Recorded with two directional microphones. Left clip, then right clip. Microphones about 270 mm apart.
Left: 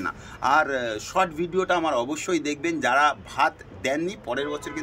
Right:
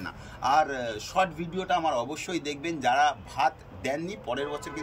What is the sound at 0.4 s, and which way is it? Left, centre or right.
Speech, centre.